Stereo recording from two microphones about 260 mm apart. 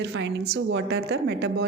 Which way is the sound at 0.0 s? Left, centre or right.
Right.